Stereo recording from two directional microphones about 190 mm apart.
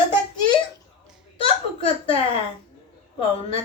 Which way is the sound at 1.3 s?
30° left (ahead or behind).